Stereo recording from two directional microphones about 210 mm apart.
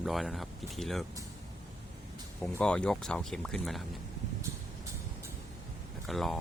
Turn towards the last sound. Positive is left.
turn(degrees=0)  # may be behind; listen again after turning